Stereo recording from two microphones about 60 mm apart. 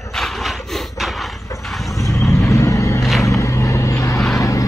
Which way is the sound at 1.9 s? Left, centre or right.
Left.